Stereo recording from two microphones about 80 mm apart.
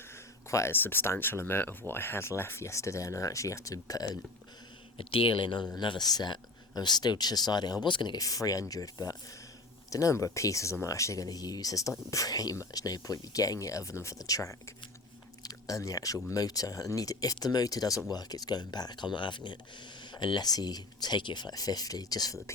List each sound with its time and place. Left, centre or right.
0.7 s speech: left
5.1 s speech: left
5.7 s speech: left